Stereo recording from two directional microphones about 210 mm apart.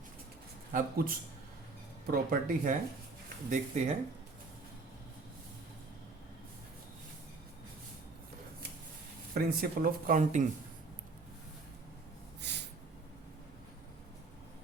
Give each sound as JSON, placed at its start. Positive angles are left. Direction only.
{"t": 0.7, "sound": "speech", "side_deg": -45}
{"t": 9.3, "sound": "speech", "side_deg": -40}
{"t": 12.4, "sound": "snort", "side_deg": -55}